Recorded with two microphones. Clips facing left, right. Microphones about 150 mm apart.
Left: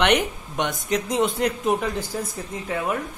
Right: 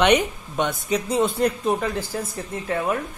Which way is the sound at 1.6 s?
Centre (ahead or behind).